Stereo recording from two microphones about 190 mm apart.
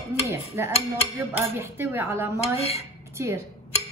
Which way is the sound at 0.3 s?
15° right (ahead or behind).